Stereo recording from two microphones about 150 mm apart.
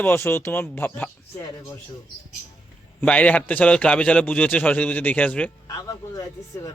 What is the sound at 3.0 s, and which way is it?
A man's voice, 10° left (ahead or behind).